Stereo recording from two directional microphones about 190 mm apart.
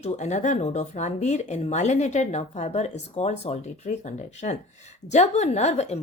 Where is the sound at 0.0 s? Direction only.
40° left (ahead or behind).